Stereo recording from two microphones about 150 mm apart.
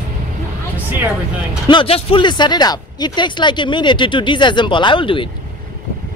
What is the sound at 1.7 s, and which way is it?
Speech, 35° left (ahead or behind).